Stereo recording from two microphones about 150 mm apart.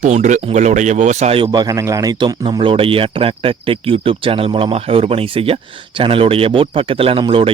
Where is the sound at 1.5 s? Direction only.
25° right (ahead or behind).